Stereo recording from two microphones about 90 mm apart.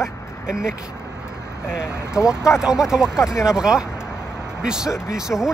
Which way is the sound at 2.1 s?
10° right (ahead or behind).